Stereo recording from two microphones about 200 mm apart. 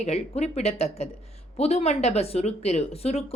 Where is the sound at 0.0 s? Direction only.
35° left (ahead or behind).